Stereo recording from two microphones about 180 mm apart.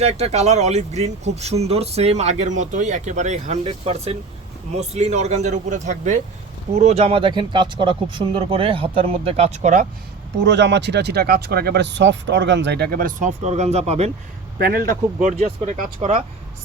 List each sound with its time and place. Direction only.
0.0 s speech: 35° right (ahead or behind)
10.3 s speech: 75° right (ahead or behind); by 14.1 s 35° right (ahead or behind)
14.6 s speech: 60° right (ahead or behind)
15.2 s speech: 45° right (ahead or behind)